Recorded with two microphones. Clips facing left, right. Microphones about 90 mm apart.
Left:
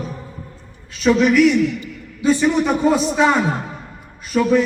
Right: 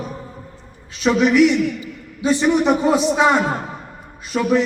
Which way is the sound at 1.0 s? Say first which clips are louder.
Left 1 dB; 20° right (ahead or behind).